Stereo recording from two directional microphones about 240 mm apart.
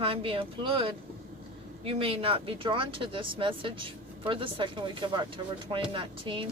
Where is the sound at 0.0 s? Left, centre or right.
Right.